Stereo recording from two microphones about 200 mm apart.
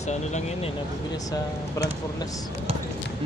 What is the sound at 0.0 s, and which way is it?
Speech, 35° left (ahead or behind).